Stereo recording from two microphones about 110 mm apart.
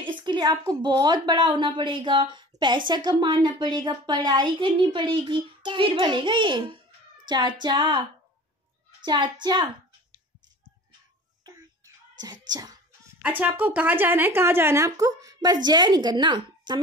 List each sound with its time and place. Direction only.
0.0 s speech: 45° right (ahead or behind)
9.0 s speech: 40° right (ahead or behind)
12.2 s a sound: 35° right (ahead or behind)
13.2 s speech: 15° right (ahead or behind); by 16.7 s 40° right (ahead or behind)